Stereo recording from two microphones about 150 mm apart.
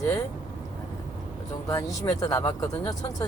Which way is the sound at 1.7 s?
20° left (ahead or behind).